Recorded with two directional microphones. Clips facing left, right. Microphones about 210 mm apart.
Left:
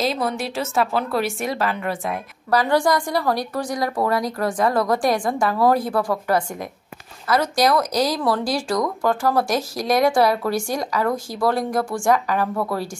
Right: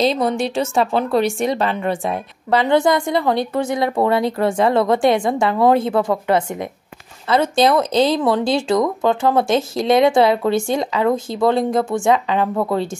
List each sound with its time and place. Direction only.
0.0 s a woman's voice: 25° right (ahead or behind)